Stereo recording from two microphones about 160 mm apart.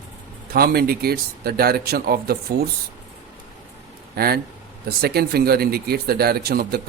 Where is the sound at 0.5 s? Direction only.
70° right (ahead or behind).